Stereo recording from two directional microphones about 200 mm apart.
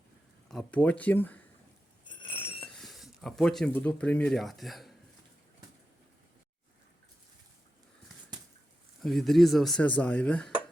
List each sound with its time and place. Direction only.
0.4 s speech: 5° left (ahead or behind)
2.0 s a sound: 25° left (ahead or behind)
2.7 s speech: centre (ahead or behind)
9.0 s speech: centre (ahead or behind)